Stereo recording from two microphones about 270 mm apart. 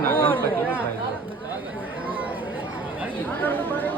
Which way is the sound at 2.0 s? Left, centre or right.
Centre.